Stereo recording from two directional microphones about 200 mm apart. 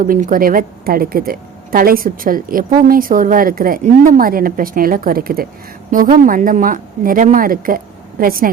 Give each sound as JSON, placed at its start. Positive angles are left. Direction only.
{"t": 0.0, "sound": "a woman's voice", "side_deg": -45}